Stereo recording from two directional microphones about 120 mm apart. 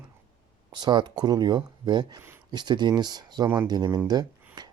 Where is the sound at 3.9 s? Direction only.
35° right (ahead or behind).